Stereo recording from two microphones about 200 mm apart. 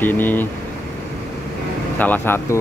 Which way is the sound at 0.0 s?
10° left (ahead or behind).